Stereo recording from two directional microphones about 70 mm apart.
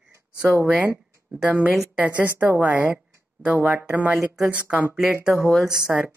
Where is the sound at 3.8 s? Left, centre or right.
Right.